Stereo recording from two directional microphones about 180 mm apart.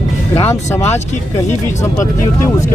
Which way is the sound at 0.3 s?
15° left (ahead or behind).